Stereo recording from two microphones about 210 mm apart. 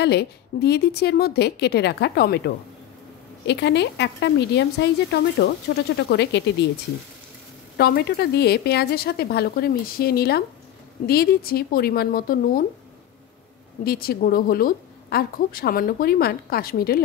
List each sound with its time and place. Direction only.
0.0 s speech: 50° left (ahead or behind)
7.7 s speech: 50° left (ahead or behind)
13.8 s speech: 45° left (ahead or behind)